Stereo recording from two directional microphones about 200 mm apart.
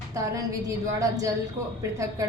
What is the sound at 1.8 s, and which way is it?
Speech, 15° right (ahead or behind).